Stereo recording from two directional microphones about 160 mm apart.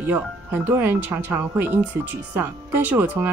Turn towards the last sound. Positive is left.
turn(degrees=-10)  # may be behind; listen again after turning